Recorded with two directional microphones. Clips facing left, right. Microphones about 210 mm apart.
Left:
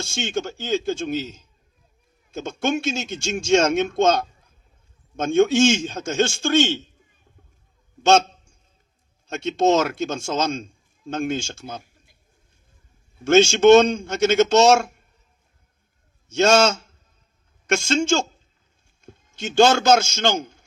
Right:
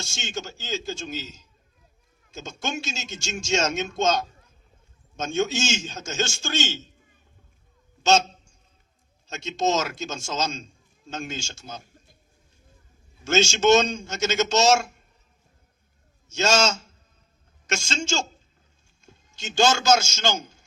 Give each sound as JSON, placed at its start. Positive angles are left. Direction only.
{"t": 0.1, "sound": "a man's voice", "side_deg": 55}
{"t": 9.2, "sound": "a man's voice", "side_deg": 55}
{"t": 13.2, "sound": "a man's voice", "side_deg": 55}
{"t": 16.3, "sound": "a man's voice", "side_deg": 55}